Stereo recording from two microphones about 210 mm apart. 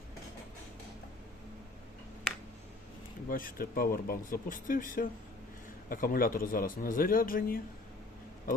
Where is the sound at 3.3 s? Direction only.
40° left (ahead or behind).